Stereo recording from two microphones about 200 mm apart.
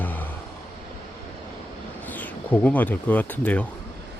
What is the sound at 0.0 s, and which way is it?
Vehicle, 10° left (ahead or behind).